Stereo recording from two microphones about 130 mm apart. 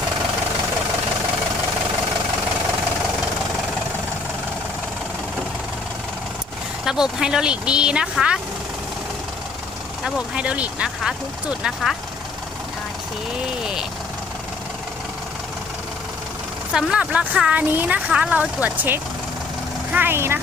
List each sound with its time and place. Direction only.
6.8 s speech: 5° right (ahead or behind)
10.0 s speech: 10° right (ahead or behind)
16.7 s speech: 10° right (ahead or behind)